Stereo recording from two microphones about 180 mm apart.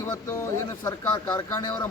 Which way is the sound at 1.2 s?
25° left (ahead or behind).